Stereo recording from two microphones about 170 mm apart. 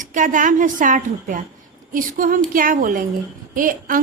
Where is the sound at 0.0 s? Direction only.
50° right (ahead or behind).